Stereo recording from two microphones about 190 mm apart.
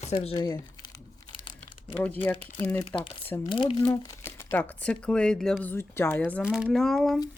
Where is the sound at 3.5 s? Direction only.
25° left (ahead or behind).